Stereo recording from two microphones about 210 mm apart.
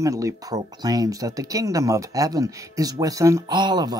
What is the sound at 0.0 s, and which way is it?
Speech, 15° right (ahead or behind).